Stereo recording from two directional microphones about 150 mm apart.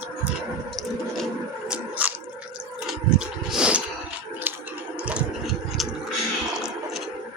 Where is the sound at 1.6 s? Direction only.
10° right (ahead or behind).